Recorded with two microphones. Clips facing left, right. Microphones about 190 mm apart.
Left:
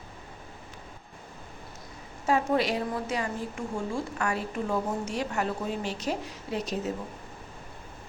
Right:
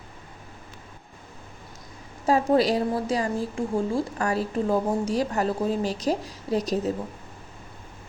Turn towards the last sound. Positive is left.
turn(degrees=-40)  # may be behind; listen again after turning